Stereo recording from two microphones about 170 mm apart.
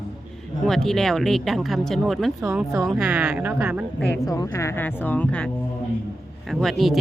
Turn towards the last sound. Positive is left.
turn(degrees=0)  # may be behind; listen again after turning